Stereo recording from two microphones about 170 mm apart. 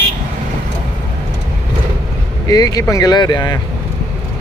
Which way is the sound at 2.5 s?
20° left (ahead or behind).